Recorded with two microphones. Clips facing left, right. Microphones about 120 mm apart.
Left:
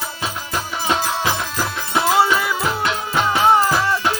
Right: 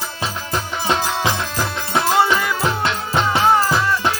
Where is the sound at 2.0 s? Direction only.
5° left (ahead or behind).